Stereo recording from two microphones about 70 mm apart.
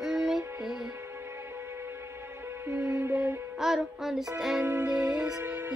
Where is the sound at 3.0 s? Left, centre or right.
Right.